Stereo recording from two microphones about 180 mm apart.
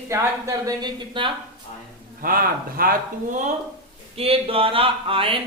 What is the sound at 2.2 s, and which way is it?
Speech, 55° right (ahead or behind).